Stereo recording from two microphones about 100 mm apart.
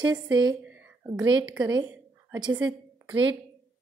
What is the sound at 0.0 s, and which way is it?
A woman's voice, 45° right (ahead or behind).